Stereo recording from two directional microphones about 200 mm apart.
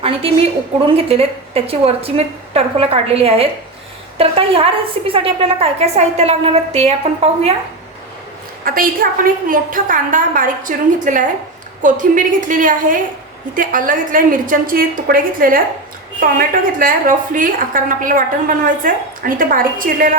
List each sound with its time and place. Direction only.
0.9 s a woman's voice: 30° right (ahead or behind)
8.6 s a woman's voice: 45° right (ahead or behind)